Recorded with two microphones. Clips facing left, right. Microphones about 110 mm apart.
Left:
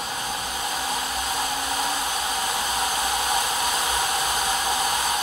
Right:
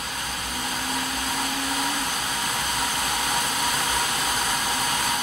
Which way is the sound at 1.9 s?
10° left (ahead or behind).